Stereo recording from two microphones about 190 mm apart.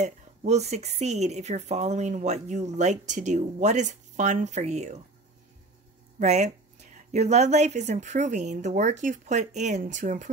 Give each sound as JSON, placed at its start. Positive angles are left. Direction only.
{"t": 0.0, "sound": "a woman's voice", "side_deg": -35}
{"t": 6.1, "sound": "a woman's voice", "side_deg": -35}